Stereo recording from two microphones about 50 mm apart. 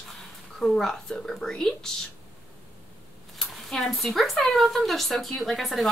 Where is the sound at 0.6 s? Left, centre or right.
Centre.